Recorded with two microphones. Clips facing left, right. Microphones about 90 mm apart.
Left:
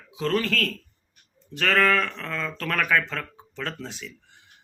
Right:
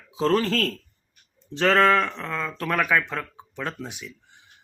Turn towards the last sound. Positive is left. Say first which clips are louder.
# right 1 dB
turn(degrees=-15)  # may be behind; listen again after turning